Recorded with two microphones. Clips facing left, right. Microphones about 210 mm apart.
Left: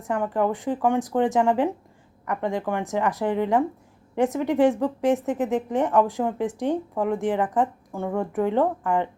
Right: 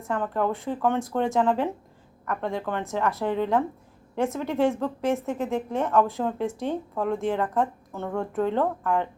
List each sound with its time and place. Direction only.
0.1 s a woman's voice: 15° left (ahead or behind)